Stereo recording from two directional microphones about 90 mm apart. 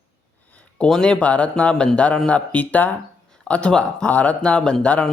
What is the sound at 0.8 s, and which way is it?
Speech, 10° left (ahead or behind).